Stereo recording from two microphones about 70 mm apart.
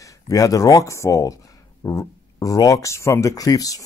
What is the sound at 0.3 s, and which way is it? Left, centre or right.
Speech, left.